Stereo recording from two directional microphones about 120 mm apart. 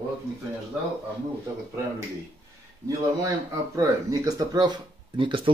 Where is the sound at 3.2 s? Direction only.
25° right (ahead or behind).